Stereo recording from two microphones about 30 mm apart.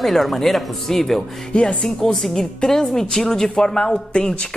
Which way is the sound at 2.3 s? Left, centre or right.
Centre.